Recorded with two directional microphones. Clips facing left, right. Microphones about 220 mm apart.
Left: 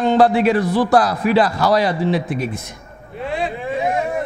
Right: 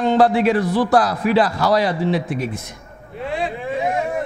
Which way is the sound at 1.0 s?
15° left (ahead or behind).